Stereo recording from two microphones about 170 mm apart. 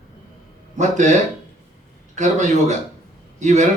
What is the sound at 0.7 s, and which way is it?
Speech, 45° right (ahead or behind).